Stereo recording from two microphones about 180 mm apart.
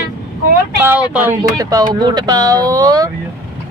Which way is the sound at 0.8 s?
10° right (ahead or behind).